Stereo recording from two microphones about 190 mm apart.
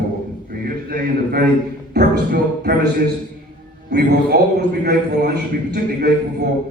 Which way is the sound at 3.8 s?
60° right (ahead or behind).